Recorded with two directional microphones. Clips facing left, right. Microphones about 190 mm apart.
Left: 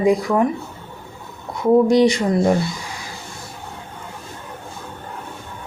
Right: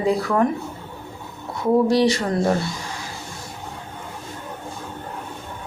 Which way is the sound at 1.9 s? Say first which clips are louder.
Left 3 dB; 15° left (ahead or behind).